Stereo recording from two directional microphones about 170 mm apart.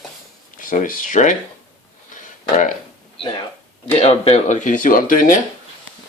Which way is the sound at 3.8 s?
40° left (ahead or behind).